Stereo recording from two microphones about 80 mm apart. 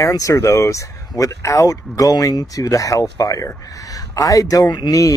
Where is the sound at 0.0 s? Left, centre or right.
Left.